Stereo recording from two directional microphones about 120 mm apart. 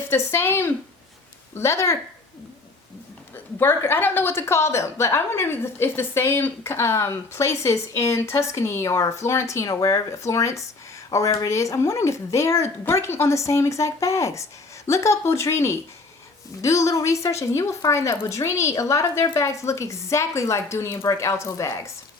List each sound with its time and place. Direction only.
0.1 s a woman's voice: 20° left (ahead or behind)
3.6 s a woman's voice: 20° left (ahead or behind)